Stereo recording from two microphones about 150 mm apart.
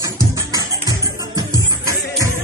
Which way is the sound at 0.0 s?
20° right (ahead or behind).